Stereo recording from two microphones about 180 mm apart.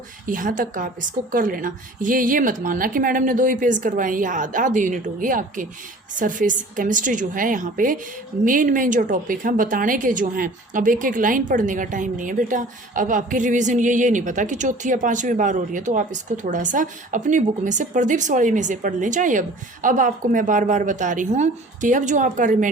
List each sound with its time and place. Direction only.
0.3 s a woman's voice: 50° right (ahead or behind)